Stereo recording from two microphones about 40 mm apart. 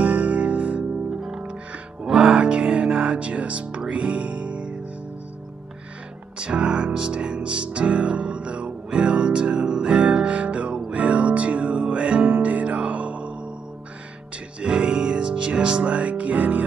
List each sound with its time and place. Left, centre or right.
0.0 s music: right
2.0 s music: right
6.3 s music: right
14.6 s music: right